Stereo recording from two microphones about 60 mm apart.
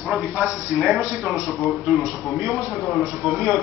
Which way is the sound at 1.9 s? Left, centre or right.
Centre.